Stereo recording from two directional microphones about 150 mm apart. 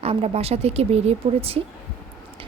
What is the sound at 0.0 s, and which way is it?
A woman's voice, 40° right (ahead or behind).